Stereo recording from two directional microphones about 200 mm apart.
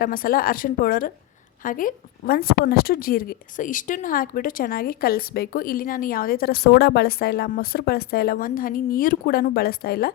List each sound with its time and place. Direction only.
0.0 s a woman's voice: 45° left (ahead or behind)